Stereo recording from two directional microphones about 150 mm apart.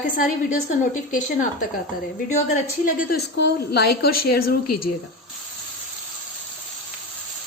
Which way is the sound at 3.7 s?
90° left.